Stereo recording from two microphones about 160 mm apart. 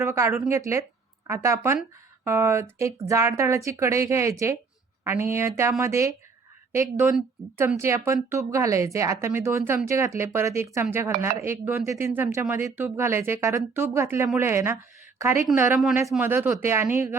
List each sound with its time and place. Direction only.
0.0 s speech: 15° right (ahead or behind)
7.8 s speech: 15° right (ahead or behind)